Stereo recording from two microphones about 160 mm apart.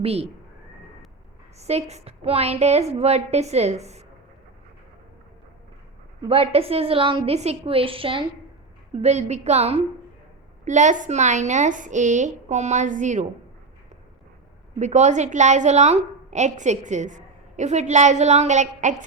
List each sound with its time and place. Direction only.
0.0 s a woman's voice: 40° right (ahead or behind)
1.5 s a woman's voice: 40° right (ahead or behind)
6.2 s a woman's voice: 35° right (ahead or behind)
14.8 s a woman's voice: 45° right (ahead or behind)